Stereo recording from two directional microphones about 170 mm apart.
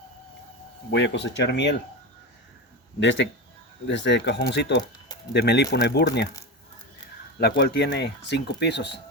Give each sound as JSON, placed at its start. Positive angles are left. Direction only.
{"t": 0.9, "sound": "speech", "side_deg": 90}
{"t": 3.0, "sound": "speech", "side_deg": 90}
{"t": 5.3, "sound": "speech", "side_deg": 80}
{"t": 7.3, "sound": "speech", "side_deg": 75}